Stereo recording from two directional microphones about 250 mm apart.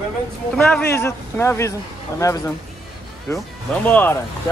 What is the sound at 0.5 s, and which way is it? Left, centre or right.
Speech, centre.